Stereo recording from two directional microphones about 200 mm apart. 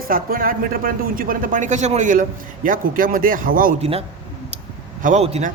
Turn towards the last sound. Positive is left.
turn(degrees=-35)  # may be behind; listen again after turning